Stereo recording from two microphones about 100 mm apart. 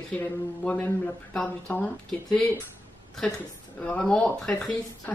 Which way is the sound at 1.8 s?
5° left (ahead or behind).